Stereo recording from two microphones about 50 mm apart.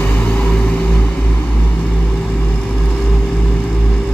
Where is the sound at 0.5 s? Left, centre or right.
Centre.